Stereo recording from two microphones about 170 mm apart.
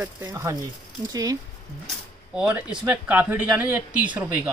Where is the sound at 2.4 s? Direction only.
5° right (ahead or behind).